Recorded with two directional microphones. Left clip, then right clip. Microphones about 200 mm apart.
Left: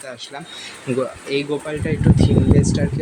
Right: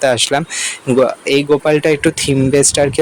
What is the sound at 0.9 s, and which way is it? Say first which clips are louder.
Speech: right 10 dB; 35° right (ahead or behind).